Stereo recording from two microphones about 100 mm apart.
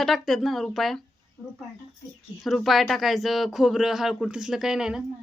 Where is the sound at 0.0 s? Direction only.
Centre (ahead or behind).